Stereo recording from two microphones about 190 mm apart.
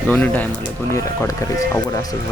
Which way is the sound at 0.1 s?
10° left (ahead or behind).